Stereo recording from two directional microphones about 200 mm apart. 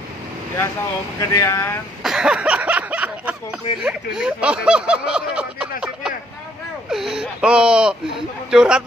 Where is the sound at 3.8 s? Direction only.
5° right (ahead or behind).